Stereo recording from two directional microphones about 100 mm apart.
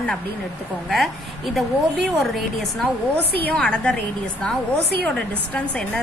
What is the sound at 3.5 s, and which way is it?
Speech, 10° left (ahead or behind).